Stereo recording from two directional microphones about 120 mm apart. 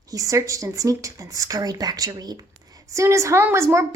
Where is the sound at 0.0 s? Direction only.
30° right (ahead or behind).